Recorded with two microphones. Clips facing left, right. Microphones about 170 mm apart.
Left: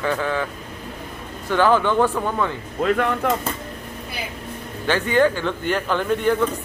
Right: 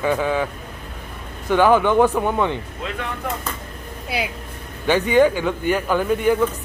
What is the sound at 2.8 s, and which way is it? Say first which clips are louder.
Speech: left 8 dB; 55° left (ahead or behind).